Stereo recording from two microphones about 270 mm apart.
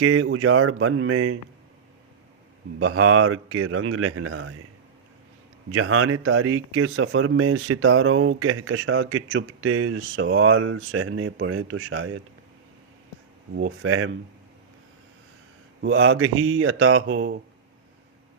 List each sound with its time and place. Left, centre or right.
0.0 s speech: right
2.7 s speech: right
5.7 s speech: right
13.6 s speech: right
15.8 s speech: right